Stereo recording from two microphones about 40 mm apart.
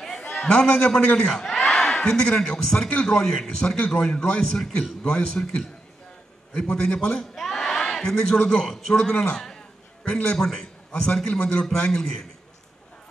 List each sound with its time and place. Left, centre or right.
0.3 s a man's voice: centre
6.6 s a man's voice: left
7.3 s crowd: centre
8.0 s a man's voice: centre